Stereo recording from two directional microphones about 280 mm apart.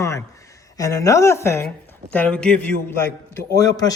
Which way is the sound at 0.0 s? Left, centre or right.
Centre.